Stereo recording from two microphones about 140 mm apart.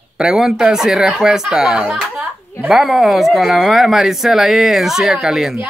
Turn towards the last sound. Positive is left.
turn(degrees=-5)  # may be behind; listen again after turning